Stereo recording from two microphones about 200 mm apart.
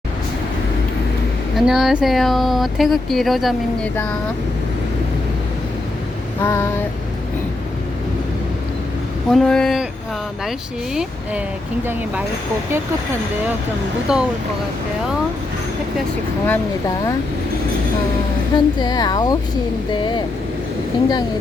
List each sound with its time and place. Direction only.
1.5 s speech: centre (ahead or behind)
6.4 s child singing: 15° left (ahead or behind)
9.3 s speech: 5° left (ahead or behind)
14.1 s speech: 5° right (ahead or behind)
18.5 s speech: 20° left (ahead or behind)